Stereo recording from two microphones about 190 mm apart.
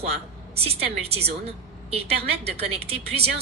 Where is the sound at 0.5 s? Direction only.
30° right (ahead or behind).